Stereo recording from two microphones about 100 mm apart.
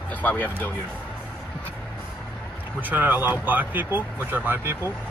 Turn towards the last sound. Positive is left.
turn(degrees=-20)  # may be behind; listen again after turning